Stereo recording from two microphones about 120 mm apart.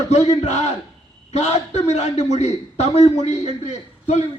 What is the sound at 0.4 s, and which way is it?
A man's voice, 70° left (ahead or behind).